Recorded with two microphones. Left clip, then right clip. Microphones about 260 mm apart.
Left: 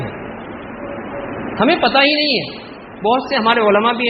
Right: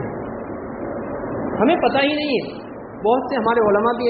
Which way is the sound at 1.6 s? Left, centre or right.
Left.